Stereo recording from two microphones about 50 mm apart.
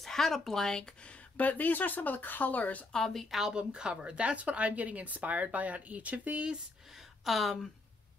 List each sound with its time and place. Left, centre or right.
0.0 s speech: centre
1.0 s speech: left
2.9 s a woman's voice: centre
3.3 s a woman's voice: centre
7.2 s a woman's voice: centre